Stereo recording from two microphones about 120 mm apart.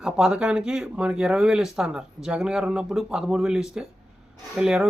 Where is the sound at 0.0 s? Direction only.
5° right (ahead or behind).